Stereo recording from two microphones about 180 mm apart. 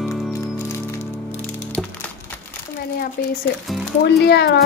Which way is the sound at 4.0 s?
65° left (ahead or behind).